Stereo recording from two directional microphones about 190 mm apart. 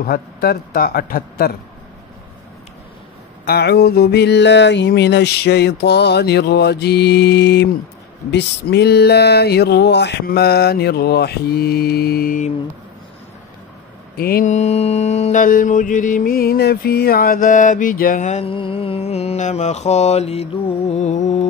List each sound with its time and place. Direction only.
0.0 s a man's voice: 55° left (ahead or behind)
3.4 s a sound: 60° left (ahead or behind)
14.1 s mantra: 50° left (ahead or behind)